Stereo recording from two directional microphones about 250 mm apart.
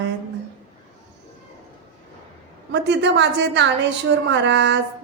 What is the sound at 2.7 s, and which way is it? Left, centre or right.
Speech, right.